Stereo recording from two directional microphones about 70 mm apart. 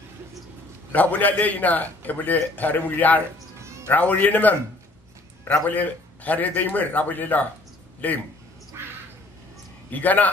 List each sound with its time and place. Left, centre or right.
0.9 s a man's voice: left
8.8 s duck: right
9.8 s a man's voice: left